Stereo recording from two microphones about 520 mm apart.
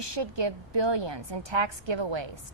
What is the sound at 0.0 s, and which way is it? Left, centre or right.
A woman's voice, right.